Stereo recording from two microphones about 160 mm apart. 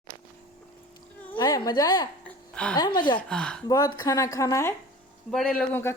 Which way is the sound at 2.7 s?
25° left (ahead or behind).